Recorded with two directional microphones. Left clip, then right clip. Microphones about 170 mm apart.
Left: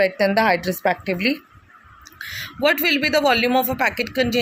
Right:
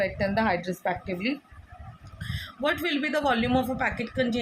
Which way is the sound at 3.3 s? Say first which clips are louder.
Left 7 dB; 60° left (ahead or behind).